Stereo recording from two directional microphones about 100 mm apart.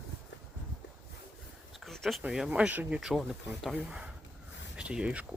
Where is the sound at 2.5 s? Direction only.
15° right (ahead or behind).